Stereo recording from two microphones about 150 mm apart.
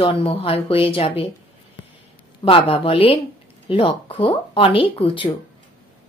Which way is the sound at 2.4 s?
40° left (ahead or behind).